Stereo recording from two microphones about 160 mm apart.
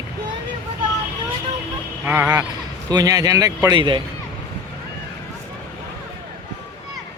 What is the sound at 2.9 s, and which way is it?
A man's voice, 25° right (ahead or behind).